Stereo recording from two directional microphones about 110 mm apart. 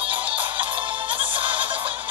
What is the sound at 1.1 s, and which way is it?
Music, 50° right (ahead or behind).